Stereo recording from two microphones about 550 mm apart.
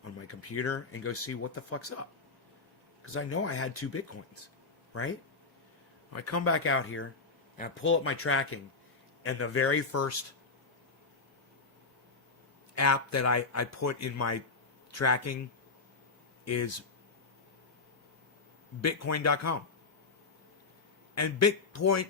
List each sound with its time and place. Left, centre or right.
0.2 s speech: left
3.1 s speech: left
6.1 s speech: left
12.7 s speech: left
16.5 s speech: left
18.8 s speech: left
21.2 s speech: left